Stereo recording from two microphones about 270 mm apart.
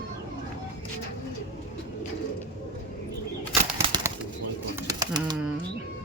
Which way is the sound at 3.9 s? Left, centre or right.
Centre.